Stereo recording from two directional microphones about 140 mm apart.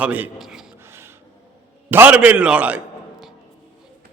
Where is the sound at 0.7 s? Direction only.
15° right (ahead or behind).